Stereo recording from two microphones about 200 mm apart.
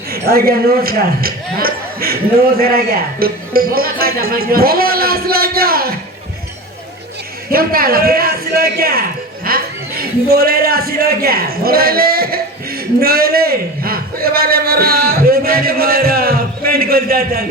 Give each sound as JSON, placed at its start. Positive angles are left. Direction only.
{"t": 0.3, "sound": "speech", "side_deg": -50}
{"t": 7.5, "sound": "a man's voice", "side_deg": -45}